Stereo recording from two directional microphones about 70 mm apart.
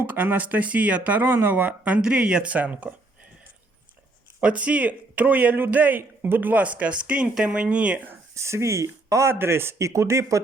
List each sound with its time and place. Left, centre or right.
0.0 s speech: right
4.4 s speech: centre
8.1 s speech: right
9.3 s speech: right